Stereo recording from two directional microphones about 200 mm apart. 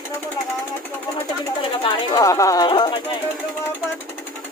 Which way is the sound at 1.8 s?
20° left (ahead or behind).